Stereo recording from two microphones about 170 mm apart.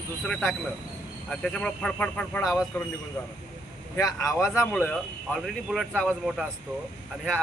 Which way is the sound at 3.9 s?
20° left (ahead or behind).